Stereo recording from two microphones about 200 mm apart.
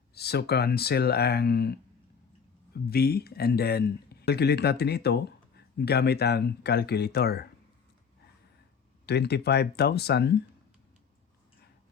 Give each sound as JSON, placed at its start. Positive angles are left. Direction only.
{"t": 0.1, "sound": "speech", "side_deg": 55}
{"t": 2.9, "sound": "speech", "side_deg": 50}
{"t": 9.0, "sound": "speech", "side_deg": 55}